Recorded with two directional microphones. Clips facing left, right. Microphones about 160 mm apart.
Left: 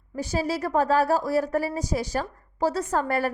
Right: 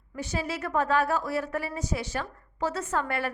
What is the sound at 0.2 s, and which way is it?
A woman's voice, 35° left (ahead or behind).